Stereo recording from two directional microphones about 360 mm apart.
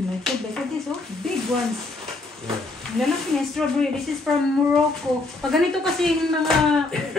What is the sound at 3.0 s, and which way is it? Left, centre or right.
Speech, centre.